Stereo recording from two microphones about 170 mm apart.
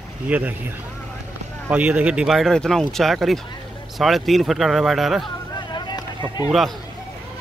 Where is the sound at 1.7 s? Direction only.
5° right (ahead or behind).